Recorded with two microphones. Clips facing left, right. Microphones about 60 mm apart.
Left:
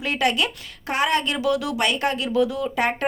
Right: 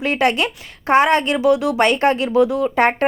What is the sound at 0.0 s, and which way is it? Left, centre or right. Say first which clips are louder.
Speech: right 5 dB; right.